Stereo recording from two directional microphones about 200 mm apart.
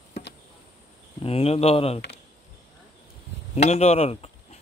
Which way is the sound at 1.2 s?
30° left (ahead or behind).